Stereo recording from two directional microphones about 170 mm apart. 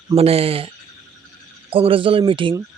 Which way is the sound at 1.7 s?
30° right (ahead or behind).